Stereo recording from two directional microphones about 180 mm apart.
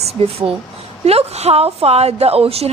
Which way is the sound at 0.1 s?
35° right (ahead or behind).